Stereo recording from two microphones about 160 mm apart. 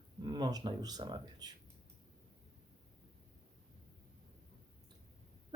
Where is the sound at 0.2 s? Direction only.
25° right (ahead or behind).